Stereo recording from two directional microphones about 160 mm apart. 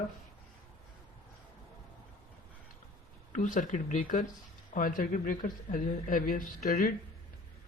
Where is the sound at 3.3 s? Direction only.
55° left (ahead or behind).